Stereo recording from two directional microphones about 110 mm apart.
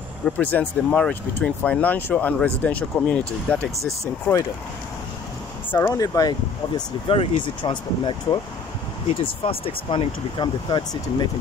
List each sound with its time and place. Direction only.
0.4 s speech: 15° left (ahead or behind)
5.8 s speech: 35° left (ahead or behind)
7.1 s speech: 50° left (ahead or behind)